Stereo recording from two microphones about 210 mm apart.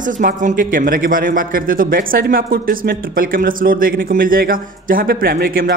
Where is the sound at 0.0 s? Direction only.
40° right (ahead or behind).